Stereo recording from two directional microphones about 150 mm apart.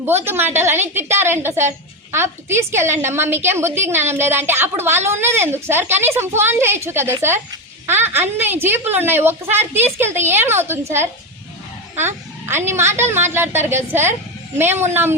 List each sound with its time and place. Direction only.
0.3 s a woman's voice: 15° right (ahead or behind)